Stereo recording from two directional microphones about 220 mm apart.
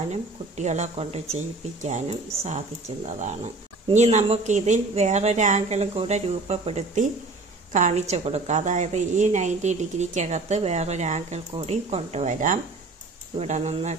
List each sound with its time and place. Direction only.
0.1 s a woman's voice: 30° right (ahead or behind)